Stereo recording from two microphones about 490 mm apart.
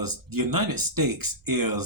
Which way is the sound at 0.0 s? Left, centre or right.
Right.